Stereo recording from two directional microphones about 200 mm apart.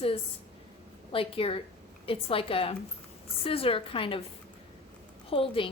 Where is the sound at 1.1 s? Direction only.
30° left (ahead or behind).